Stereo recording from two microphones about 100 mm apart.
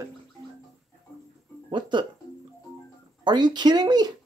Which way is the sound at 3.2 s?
50° right (ahead or behind).